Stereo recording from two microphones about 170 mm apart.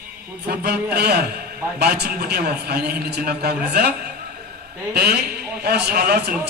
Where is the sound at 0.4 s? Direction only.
75° right (ahead or behind).